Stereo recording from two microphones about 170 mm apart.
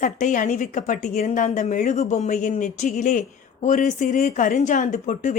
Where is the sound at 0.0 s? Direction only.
50° left (ahead or behind).